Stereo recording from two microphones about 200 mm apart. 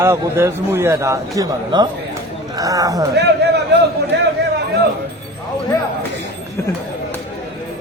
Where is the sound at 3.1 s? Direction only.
55° right (ahead or behind).